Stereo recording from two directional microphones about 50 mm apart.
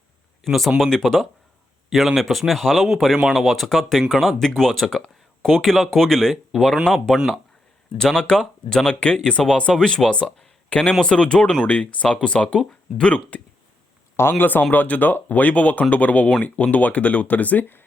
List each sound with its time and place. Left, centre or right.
0.4 s speech: centre
1.9 s speech: centre
6.3 s speech: centre
6.8 s speech: centre; by 13.4 s left
14.2 s speech: left